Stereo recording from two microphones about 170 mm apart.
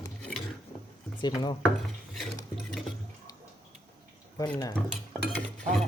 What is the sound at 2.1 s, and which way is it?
Stir, centre (ahead or behind).